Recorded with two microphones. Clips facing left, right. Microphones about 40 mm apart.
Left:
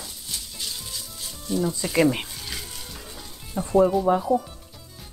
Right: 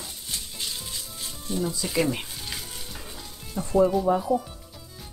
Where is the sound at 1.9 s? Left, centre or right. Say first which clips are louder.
Left 6 dB; centre.